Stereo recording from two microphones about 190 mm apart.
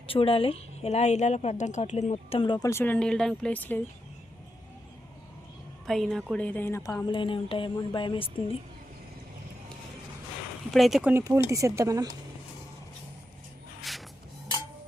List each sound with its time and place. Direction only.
0.1 s speech: 30° left (ahead or behind); by 3.8 s 10° left (ahead or behind)
5.8 s speech: centre (ahead or behind); by 8.5 s 25° left (ahead or behind)
10.7 s speech: centre (ahead or behind)
11.1 s speech: 15° right (ahead or behind)
13.9 s music: centre (ahead or behind)